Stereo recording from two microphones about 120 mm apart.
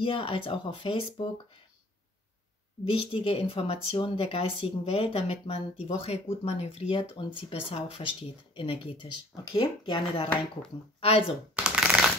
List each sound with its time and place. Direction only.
0.0 s speech: 45° left (ahead or behind)
2.9 s speech: 45° left (ahead or behind)
11.5 s shuffling cards: 10° right (ahead or behind)